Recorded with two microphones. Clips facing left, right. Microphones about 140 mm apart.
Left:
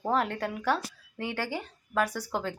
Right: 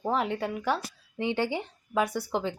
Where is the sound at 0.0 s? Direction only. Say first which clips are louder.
Even; 5° right (ahead or behind).